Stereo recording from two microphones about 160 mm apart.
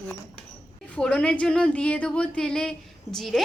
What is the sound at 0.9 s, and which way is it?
A woman's voice, 5° left (ahead or behind).